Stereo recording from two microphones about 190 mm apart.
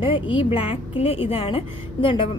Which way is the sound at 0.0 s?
25° left (ahead or behind).